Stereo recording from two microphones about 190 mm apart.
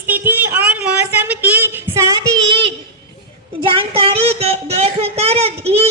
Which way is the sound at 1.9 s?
15° right (ahead or behind).